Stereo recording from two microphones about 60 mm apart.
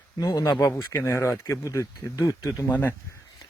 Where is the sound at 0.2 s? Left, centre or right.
Left.